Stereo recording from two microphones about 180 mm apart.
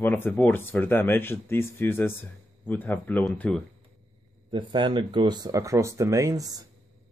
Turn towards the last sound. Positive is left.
turn(degrees=-20)  # may be behind; listen again after turning